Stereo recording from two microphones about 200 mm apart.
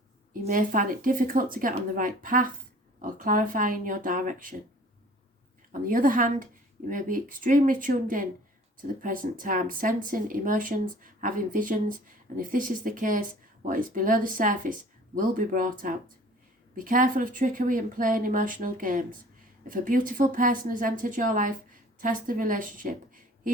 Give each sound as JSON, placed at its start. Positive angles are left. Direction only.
{"t": 0.4, "sound": "speech", "side_deg": -40}
{"t": 5.8, "sound": "speech", "side_deg": -45}